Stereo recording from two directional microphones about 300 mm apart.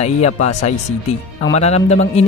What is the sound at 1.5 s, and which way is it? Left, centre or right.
Speech, left.